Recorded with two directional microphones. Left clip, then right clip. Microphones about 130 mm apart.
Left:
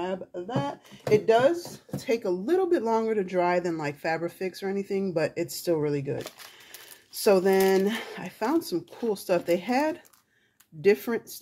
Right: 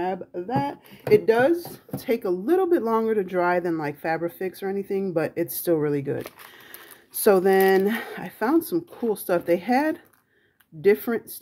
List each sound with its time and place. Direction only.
0.0 s speech: 65° right (ahead or behind)
1.0 s speech: 90° right; by 2.3 s 65° right (ahead or behind)
2.4 s speech: 40° right (ahead or behind)